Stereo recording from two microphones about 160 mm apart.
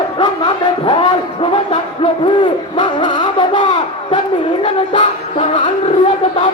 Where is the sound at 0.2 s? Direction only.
25° left (ahead or behind).